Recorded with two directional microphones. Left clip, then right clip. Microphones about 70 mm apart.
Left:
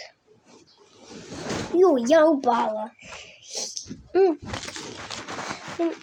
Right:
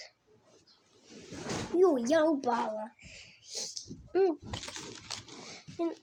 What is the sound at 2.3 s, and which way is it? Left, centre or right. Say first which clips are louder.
Speech: left 9 dB; centre.